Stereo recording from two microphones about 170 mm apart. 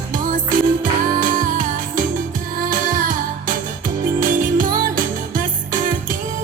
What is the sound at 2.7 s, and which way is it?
Music, 50° right (ahead or behind).